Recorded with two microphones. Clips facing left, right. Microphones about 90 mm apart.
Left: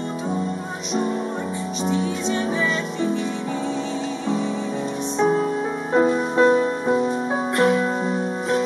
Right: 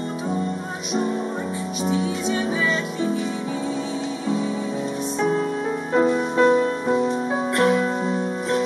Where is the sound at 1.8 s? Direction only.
5° right (ahead or behind).